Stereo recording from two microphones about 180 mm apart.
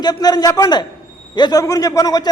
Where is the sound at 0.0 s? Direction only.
20° left (ahead or behind).